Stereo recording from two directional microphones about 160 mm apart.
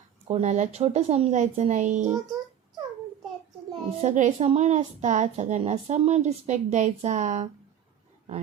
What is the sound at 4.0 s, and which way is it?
A woman's voice, 50° right (ahead or behind).